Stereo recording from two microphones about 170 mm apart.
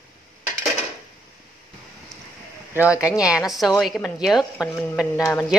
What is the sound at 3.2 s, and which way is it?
A woman's voice, 5° right (ahead or behind).